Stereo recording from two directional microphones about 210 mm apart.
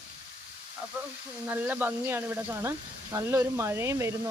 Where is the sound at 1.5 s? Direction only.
10° right (ahead or behind).